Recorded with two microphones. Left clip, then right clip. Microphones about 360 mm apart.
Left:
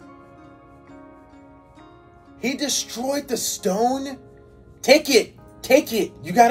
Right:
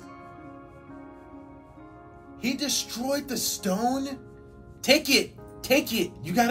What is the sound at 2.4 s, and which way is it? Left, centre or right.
Speech, centre.